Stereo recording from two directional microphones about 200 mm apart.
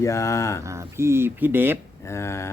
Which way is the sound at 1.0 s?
10° right (ahead or behind).